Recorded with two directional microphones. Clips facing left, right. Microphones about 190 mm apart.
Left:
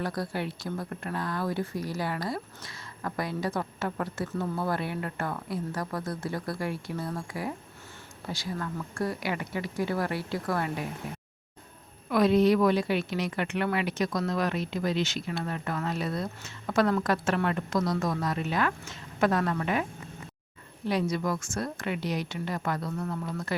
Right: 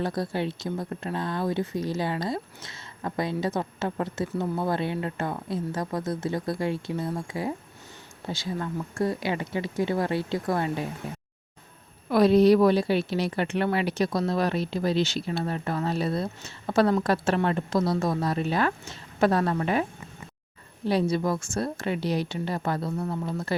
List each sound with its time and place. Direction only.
0.0 s a woman's voice: 25° right (ahead or behind)
20.8 s speech: 30° right (ahead or behind)